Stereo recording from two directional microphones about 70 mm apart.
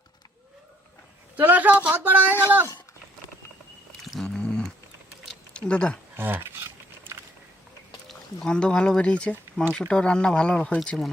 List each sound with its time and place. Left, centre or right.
1.4 s speech: right
4.4 s a sound: centre
5.5 s speech: centre
6.1 s speech: right
6.4 s a sound: right
8.0 s speech: centre